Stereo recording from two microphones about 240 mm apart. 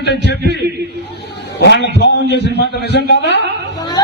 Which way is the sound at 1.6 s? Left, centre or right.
Left.